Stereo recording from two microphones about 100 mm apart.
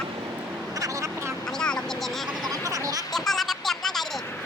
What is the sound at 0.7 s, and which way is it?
Vehicle, 35° right (ahead or behind).